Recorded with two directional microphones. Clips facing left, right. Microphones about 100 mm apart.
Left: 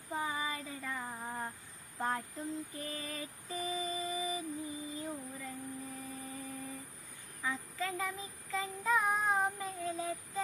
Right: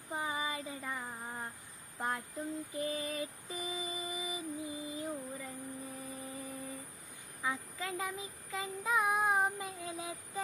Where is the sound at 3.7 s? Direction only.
15° right (ahead or behind).